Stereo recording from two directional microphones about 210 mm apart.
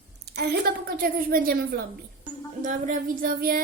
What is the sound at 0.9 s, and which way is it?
Speech, 45° right (ahead or behind).